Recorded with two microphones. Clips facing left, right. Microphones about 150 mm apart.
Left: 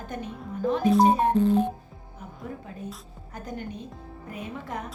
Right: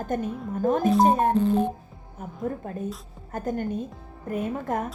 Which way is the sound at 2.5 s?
50° right (ahead or behind).